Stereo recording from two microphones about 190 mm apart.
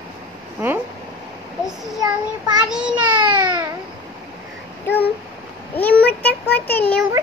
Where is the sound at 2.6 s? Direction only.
5° right (ahead or behind).